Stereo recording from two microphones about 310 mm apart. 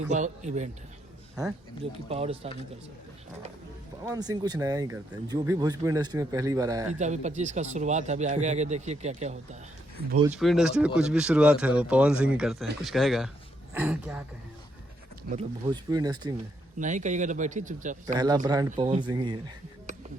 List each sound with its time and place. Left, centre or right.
0.1 s speech: right
1.8 s speech: centre
4.0 s speech: centre
7.0 s speech: right
10.2 s speech: centre
15.6 s speech: centre
16.7 s speech: right
18.0 s speech: centre